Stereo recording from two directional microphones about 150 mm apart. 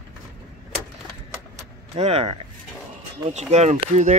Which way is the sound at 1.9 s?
45° right (ahead or behind).